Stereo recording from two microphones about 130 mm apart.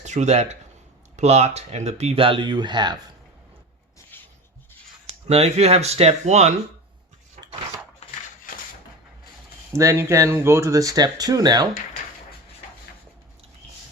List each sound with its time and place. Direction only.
0.0 s speech: 65° right (ahead or behind); by 2.9 s 35° right (ahead or behind)
4.1 s rub: 15° left (ahead or behind)
5.3 s speech: 55° right (ahead or behind)
9.7 s speech: 20° right (ahead or behind)